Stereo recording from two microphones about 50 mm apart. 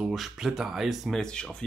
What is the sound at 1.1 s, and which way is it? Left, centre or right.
Speech, centre.